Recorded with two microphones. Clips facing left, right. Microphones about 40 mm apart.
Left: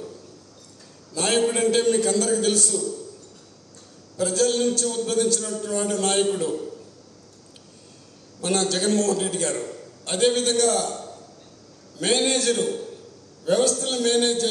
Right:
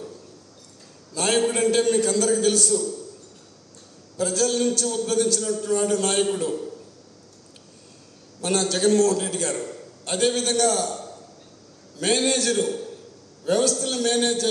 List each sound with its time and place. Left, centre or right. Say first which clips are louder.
1.1 s a man's voice: even; left
4.2 s a man's voice: left 1 dB; left
8.4 s a man's voice: even; left